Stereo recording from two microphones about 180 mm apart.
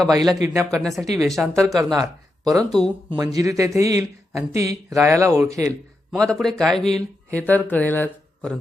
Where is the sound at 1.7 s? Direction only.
20° right (ahead or behind).